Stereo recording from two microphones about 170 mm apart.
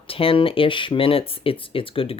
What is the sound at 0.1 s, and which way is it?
Speech, 35° left (ahead or behind).